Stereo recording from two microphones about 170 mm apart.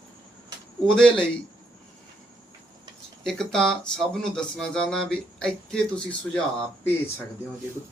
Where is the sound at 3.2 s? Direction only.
5° left (ahead or behind).